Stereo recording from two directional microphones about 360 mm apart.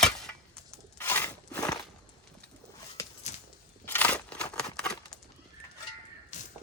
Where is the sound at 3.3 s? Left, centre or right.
Centre.